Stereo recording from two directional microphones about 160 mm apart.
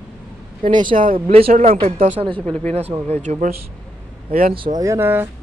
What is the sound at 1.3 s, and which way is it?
Speech, 40° right (ahead or behind).